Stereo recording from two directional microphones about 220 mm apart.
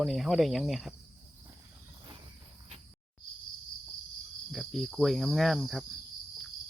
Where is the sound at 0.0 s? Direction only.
Centre (ahead or behind).